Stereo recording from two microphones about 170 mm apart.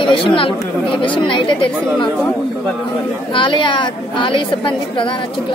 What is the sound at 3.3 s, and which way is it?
A woman's voice, 30° left (ahead or behind).